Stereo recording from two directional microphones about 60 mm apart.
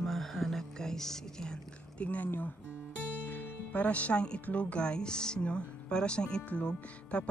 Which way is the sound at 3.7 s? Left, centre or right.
Left.